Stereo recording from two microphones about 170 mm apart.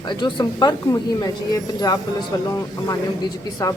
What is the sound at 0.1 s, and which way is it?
Speech, 25° left (ahead or behind).